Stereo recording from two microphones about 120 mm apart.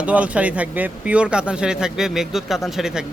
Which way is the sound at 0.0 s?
10° right (ahead or behind).